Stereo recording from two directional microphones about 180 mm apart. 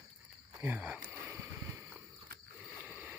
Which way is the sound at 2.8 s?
10° right (ahead or behind).